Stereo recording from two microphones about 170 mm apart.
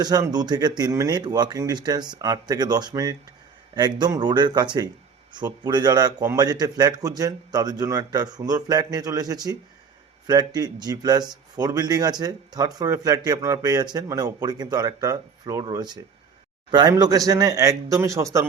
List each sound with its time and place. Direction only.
0.0 s speech: 20° right (ahead or behind)